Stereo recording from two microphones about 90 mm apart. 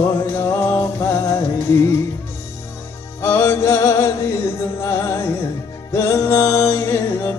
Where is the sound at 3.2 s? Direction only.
30° left (ahead or behind).